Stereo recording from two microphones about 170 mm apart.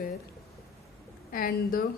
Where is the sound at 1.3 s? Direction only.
55° left (ahead or behind).